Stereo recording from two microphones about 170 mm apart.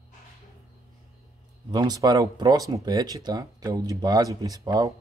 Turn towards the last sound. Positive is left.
turn(degrees=-20)  # may be behind; listen again after turning